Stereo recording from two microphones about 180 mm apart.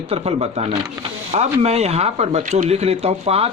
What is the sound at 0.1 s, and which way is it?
A man's voice, 35° right (ahead or behind).